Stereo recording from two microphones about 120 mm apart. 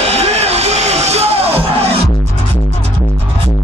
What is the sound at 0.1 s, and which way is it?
Music, 60° right (ahead or behind).